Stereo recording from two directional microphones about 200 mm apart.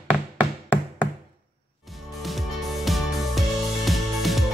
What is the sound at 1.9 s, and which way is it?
Music, centre (ahead or behind).